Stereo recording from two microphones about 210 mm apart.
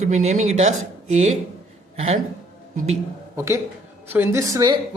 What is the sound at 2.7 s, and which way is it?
Speech, 30° right (ahead or behind).